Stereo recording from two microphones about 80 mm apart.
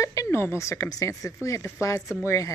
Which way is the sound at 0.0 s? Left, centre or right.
Left.